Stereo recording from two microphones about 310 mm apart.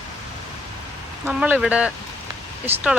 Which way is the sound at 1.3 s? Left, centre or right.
Centre.